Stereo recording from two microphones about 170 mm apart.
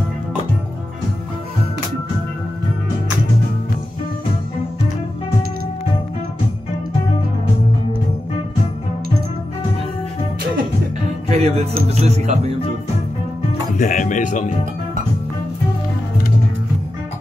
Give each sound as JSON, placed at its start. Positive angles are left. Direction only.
{"t": 11.2, "sound": "music", "side_deg": -40}
{"t": 12.0, "sound": "speech", "side_deg": -40}
{"t": 13.7, "sound": "speech", "side_deg": 50}